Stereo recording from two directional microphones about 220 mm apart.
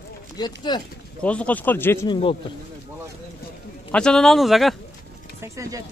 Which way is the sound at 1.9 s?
20° left (ahead or behind).